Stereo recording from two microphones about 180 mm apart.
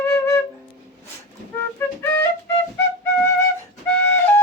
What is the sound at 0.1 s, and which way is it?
Flute, 15° left (ahead or behind).